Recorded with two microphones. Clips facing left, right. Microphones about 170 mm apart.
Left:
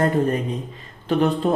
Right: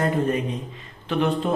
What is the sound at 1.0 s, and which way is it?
Speech, 40° left (ahead or behind).